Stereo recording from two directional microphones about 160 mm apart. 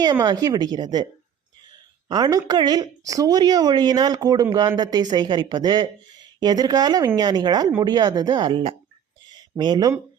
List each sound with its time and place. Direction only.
0.0 s speech: 25° right (ahead or behind)
2.0 s speech: 25° right (ahead or behind)
9.3 s a sound: 25° right (ahead or behind)